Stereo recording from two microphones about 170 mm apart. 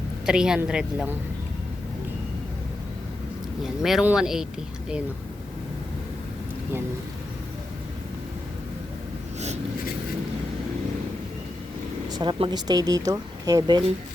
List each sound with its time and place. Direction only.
0.3 s a woman's voice: 5° right (ahead or behind)
3.6 s a woman's voice: centre (ahead or behind)
12.0 s speech: 25° right (ahead or behind)